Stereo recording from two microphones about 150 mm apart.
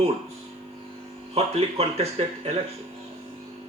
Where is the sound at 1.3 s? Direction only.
45° right (ahead or behind).